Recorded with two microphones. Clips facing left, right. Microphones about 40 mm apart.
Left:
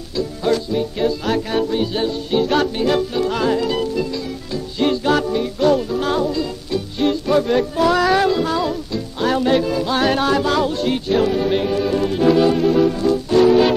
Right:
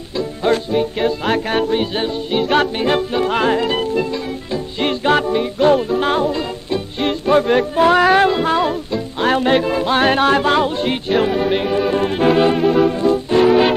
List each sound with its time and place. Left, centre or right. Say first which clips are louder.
0.1 s music: right 2 dB; right